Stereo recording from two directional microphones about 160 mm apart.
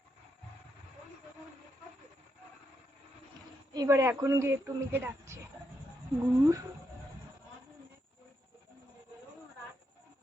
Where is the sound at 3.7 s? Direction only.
20° right (ahead or behind).